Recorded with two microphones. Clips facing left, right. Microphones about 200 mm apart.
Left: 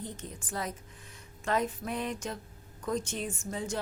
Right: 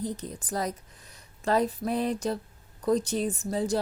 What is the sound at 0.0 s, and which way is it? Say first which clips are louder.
A woman's voice: right 8 dB; 35° right (ahead or behind).